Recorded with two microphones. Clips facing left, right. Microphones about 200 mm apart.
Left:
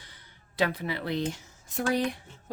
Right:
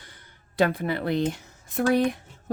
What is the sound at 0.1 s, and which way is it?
Speech, 50° right (ahead or behind).